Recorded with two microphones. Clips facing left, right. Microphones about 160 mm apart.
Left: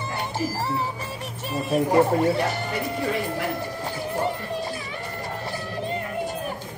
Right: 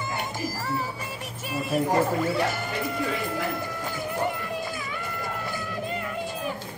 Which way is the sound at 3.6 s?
30° left (ahead or behind).